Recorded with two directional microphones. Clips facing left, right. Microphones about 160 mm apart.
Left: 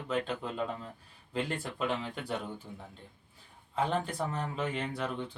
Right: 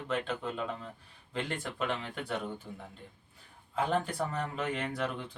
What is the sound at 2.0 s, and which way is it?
Speech, centre (ahead or behind).